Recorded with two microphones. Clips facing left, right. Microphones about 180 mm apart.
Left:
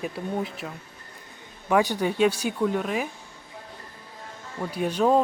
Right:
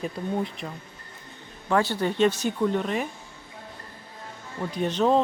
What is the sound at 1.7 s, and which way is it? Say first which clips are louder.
Speech: left 1 dB; 15° left (ahead or behind).